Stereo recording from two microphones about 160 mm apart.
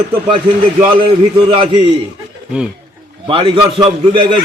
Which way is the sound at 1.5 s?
35° right (ahead or behind).